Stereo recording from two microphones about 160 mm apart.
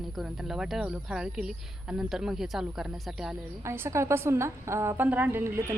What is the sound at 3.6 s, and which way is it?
A woman's voice, 15° right (ahead or behind).